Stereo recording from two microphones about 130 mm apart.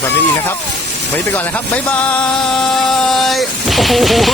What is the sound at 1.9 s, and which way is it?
Music, 10° left (ahead or behind).